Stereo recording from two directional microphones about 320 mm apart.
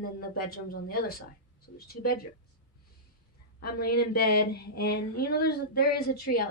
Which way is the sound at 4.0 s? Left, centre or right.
Left.